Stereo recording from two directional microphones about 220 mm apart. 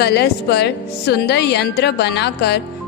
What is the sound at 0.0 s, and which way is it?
A woman's voice, 50° left (ahead or behind).